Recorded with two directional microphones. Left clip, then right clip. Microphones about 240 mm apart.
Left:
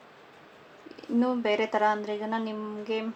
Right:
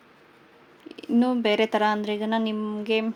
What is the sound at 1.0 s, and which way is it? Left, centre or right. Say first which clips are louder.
Speech: right 4 dB; right.